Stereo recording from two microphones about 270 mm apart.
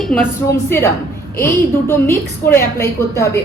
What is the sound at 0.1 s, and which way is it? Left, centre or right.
Speech, centre.